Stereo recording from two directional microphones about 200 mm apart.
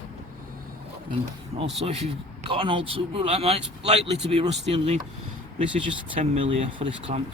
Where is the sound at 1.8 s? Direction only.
30° right (ahead or behind).